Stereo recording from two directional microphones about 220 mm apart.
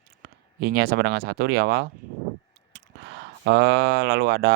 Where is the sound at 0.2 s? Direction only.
50° right (ahead or behind).